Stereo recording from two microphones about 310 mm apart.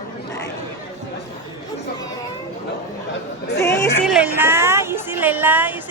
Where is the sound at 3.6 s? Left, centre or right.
Centre.